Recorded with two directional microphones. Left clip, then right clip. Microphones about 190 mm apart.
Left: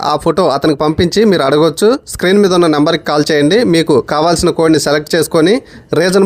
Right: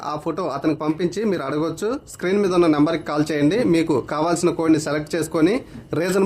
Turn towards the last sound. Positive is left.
turn(degrees=35)  # may be behind; listen again after turning